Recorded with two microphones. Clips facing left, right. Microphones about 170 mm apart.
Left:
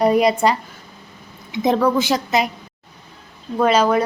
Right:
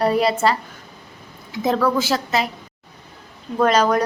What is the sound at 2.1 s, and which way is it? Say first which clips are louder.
Speech: left 2 dB; 15° left (ahead or behind).